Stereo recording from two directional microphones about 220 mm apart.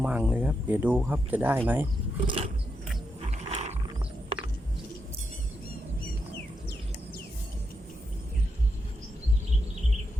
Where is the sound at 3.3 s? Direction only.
30° right (ahead or behind).